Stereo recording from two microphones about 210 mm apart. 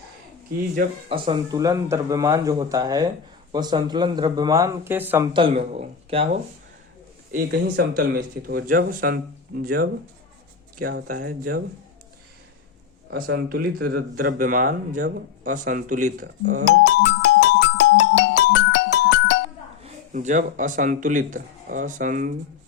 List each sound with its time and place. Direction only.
1.1 s speech: 25° right (ahead or behind)
5.3 s speech: 25° right (ahead or behind)
7.3 s speech: 45° right (ahead or behind)
13.2 s speech: 50° right (ahead or behind)
16.8 s music: 60° left (ahead or behind)
19.8 s speech: 35° right (ahead or behind)